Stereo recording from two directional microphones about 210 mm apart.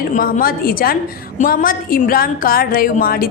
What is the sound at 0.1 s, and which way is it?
A woman's voice, 40° left (ahead or behind).